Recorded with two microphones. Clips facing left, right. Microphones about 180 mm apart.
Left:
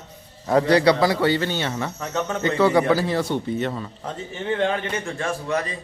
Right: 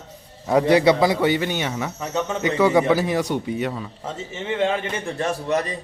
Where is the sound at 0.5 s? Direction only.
20° right (ahead or behind).